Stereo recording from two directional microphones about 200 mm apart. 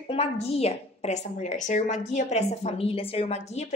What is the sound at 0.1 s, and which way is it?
A woman's voice, 30° left (ahead or behind).